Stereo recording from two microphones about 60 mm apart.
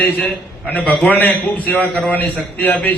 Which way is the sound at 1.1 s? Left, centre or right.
Left.